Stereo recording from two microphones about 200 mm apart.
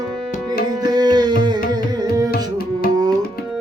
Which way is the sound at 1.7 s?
20° right (ahead or behind).